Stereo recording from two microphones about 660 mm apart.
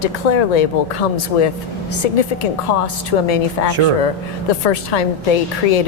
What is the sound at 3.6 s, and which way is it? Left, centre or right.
Speech, left.